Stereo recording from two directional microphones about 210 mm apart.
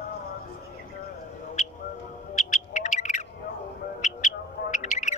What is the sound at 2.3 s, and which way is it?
Owl, 40° left (ahead or behind).